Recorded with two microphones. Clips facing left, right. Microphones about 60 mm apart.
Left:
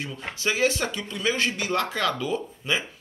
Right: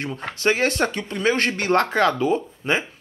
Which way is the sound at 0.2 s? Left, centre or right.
Right.